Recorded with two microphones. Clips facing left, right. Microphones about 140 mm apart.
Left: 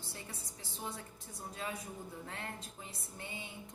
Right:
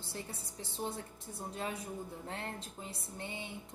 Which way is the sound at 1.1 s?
25° right (ahead or behind).